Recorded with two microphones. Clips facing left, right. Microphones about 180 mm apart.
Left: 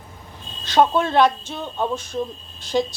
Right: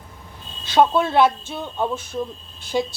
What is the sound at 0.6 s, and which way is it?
A woman's voice, 10° right (ahead or behind).